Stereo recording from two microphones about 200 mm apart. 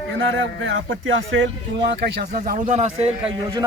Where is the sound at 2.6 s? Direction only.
35° right (ahead or behind).